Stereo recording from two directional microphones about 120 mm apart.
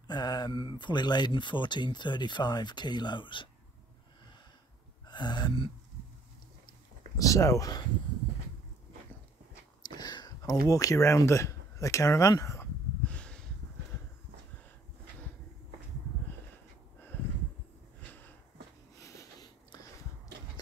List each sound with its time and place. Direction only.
0.0 s speech: 35° left (ahead or behind)
5.0 s gasp: 40° left (ahead or behind)
7.2 s speech: 25° left (ahead or behind)
9.8 s speech: 35° left (ahead or behind)
13.0 s a sound: 10° left (ahead or behind)
18.9 s a sound: 25° left (ahead or behind)